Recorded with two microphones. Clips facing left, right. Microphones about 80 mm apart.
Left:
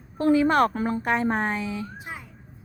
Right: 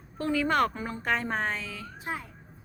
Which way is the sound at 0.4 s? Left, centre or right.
Centre.